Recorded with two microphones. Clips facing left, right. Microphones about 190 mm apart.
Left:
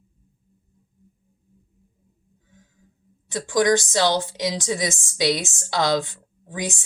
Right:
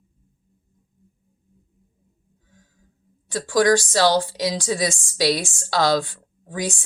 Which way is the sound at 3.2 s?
20° left (ahead or behind).